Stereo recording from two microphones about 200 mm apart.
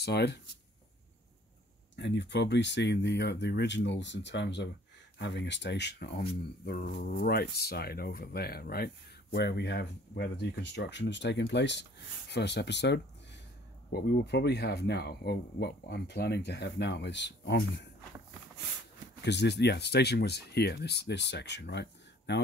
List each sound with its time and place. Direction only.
0.0 s speech: 55° left (ahead or behind)
2.0 s speech: 60° left (ahead or behind)
19.2 s speech: 60° left (ahead or behind)